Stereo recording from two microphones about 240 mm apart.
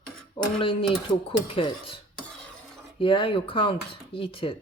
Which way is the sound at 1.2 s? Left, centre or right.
Left.